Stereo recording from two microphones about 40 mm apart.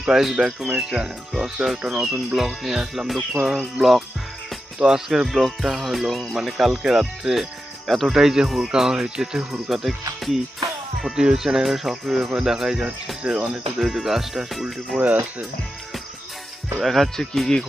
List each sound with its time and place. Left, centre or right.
0.0 s speech: centre
2.3 s speech: centre
2.7 s speech: right; by 8.1 s centre
8.1 s speech: centre
9.5 s speech: centre
13.2 s speech: right
13.7 s speech: centre
16.8 s speech: centre
17.2 s speech: centre